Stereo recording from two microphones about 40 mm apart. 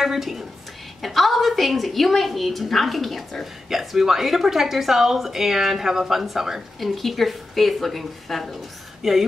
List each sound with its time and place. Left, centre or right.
0.0 s a woman's voice: centre